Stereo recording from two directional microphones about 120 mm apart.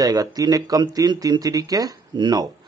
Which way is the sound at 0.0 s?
30° right (ahead or behind).